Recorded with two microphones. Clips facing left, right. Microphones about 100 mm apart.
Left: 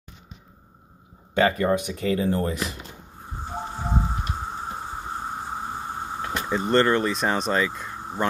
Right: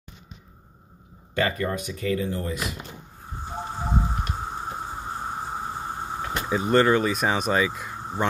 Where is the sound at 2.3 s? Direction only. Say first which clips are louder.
Left 4 dB; 40° left (ahead or behind).